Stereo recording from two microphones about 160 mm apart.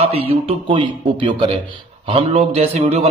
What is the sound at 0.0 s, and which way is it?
A man's voice, 35° right (ahead or behind).